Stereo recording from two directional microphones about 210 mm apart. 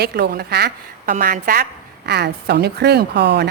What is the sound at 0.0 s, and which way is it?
Speech, 50° right (ahead or behind).